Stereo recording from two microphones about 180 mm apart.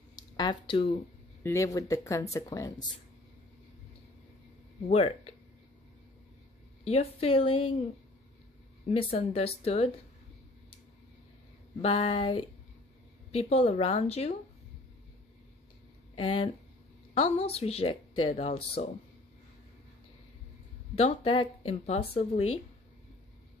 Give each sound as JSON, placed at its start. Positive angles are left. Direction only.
{"t": 0.1, "sound": "speech", "side_deg": 25}
{"t": 1.4, "sound": "speech", "side_deg": 15}
{"t": 4.8, "sound": "speech", "side_deg": 35}
{"t": 6.8, "sound": "speech", "side_deg": 35}
{"t": 8.8, "sound": "speech", "side_deg": 35}
{"t": 11.8, "sound": "speech", "side_deg": 30}
{"t": 16.2, "sound": "speech", "side_deg": 30}
{"t": 20.9, "sound": "speech", "side_deg": 35}